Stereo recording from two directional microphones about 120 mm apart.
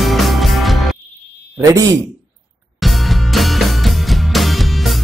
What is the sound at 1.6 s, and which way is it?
Speech, 25° right (ahead or behind).